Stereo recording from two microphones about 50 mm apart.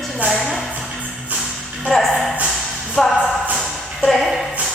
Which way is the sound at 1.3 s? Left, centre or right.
Right.